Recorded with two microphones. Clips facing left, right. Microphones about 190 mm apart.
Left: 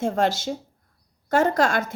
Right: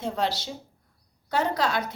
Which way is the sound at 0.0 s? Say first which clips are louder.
Left 6 dB; 50° left (ahead or behind).